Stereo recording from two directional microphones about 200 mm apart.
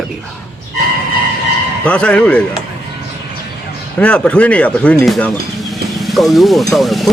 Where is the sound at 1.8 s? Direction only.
5° left (ahead or behind).